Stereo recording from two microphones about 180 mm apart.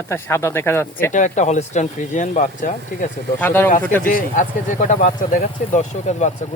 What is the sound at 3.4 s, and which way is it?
Speech, 10° left (ahead or behind).